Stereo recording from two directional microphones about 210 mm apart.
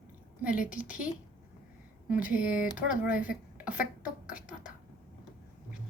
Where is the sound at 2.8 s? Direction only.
5° right (ahead or behind).